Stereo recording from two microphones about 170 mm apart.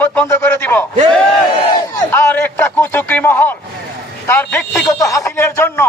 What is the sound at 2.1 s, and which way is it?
Speech, 15° left (ahead or behind).